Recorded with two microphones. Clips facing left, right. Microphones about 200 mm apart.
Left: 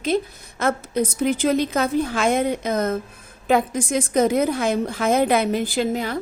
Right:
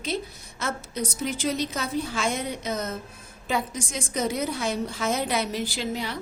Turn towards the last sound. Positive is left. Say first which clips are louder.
# left 8 dB
turn(degrees=50)  # may be behind; listen again after turning